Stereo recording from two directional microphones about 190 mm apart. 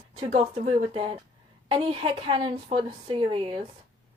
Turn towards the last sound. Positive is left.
turn(degrees=-25)  # may be behind; listen again after turning